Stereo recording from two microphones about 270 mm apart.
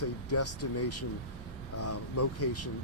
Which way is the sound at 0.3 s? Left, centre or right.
Left.